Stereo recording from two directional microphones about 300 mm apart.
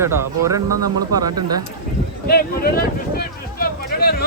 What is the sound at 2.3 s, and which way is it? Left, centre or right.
Speech, left.